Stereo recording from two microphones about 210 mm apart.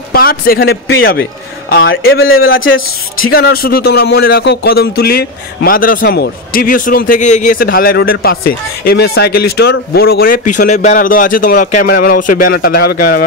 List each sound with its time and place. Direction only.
0.1 s speech: 45° left (ahead or behind)
2.5 s speech: 70° left (ahead or behind)
3.3 s speech: 45° left (ahead or behind)